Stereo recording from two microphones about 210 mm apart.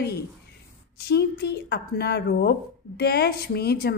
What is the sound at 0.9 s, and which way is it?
A woman's voice, 50° left (ahead or behind).